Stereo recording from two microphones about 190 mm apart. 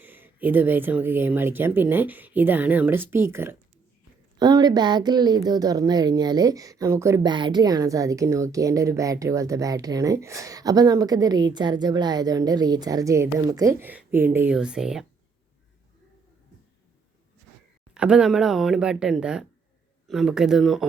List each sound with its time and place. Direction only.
0.0 s speech: 10° right (ahead or behind)
17.9 s speech: 5° right (ahead or behind)